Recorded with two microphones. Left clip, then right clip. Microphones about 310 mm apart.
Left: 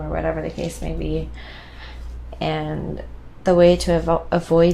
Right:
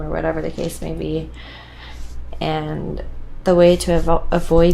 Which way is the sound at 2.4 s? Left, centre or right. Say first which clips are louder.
Right 2 dB; left.